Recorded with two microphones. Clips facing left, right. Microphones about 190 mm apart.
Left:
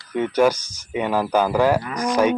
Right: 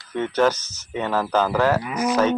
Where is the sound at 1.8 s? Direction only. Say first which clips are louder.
Right 1 dB; 5° right (ahead or behind).